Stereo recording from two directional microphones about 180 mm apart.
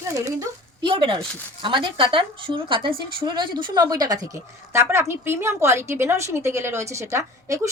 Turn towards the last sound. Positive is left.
turn(degrees=-15)  # may be behind; listen again after turning